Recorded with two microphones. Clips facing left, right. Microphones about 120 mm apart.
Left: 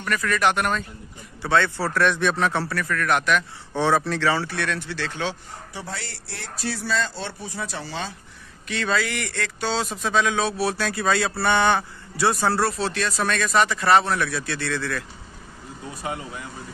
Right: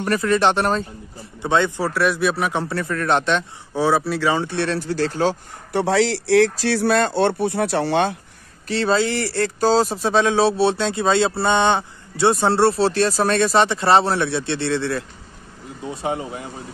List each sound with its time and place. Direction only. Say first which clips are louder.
0.0 s speech: right 5 dB; 30° right (ahead or behind)
1.4 s speech: right 2 dB; 20° right (ahead or behind)
1.9 s speech: right 2 dB; 5° right (ahead or behind); by 3.4 s 30° right (ahead or behind)
3.7 s speech: right 2 dB; 10° right (ahead or behind); by 5.4 s 40° right (ahead or behind)
5.7 s speech: right 18 dB; 80° right
8.6 s speech: right 6 dB; 35° right (ahead or behind)